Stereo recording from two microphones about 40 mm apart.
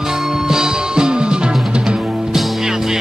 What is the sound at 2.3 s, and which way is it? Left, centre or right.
Music, centre.